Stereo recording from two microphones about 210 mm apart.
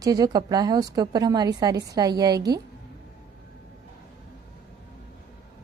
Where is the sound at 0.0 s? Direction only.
20° right (ahead or behind).